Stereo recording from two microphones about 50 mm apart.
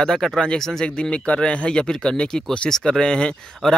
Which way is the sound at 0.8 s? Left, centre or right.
Left.